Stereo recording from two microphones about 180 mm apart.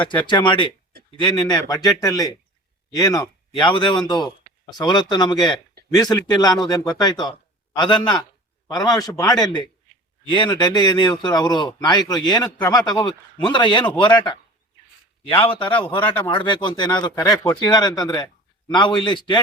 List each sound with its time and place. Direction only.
0.0 s a man's voice: 25° left (ahead or behind)